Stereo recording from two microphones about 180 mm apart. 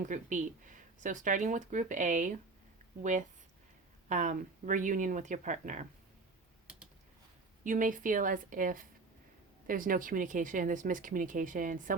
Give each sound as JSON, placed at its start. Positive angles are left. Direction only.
{"t": 0.0, "sound": "speech", "side_deg": -45}
{"t": 6.7, "sound": "typing", "side_deg": -5}
{"t": 7.6, "sound": "speech", "side_deg": -45}